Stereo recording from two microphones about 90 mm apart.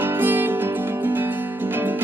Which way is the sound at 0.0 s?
20° right (ahead or behind).